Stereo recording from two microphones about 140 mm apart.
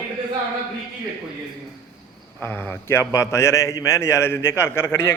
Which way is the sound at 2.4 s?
15° left (ahead or behind).